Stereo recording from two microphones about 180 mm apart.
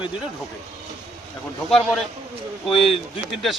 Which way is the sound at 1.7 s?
5° left (ahead or behind).